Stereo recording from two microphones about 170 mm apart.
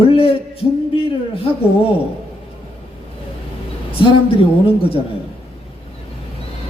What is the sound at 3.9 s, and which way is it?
A man's voice, 35° left (ahead or behind).